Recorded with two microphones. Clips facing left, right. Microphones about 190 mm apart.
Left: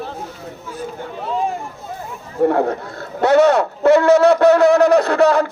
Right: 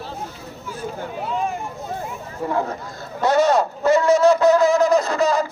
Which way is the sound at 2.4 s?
60° left (ahead or behind).